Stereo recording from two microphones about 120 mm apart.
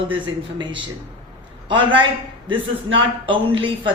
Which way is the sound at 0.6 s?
45° right (ahead or behind).